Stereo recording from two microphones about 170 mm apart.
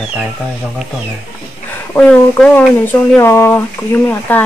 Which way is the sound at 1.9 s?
5° left (ahead or behind).